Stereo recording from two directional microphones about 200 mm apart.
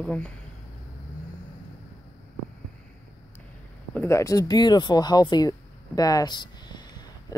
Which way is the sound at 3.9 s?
10° left (ahead or behind).